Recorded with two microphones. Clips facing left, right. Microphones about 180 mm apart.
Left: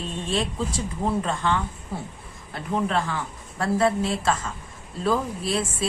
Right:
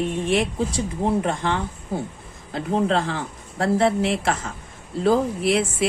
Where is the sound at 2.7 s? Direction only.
30° right (ahead or behind).